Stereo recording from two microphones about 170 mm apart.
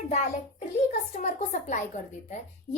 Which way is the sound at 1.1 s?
45° left (ahead or behind).